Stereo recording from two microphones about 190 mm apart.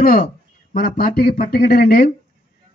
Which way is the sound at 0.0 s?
50° left (ahead or behind).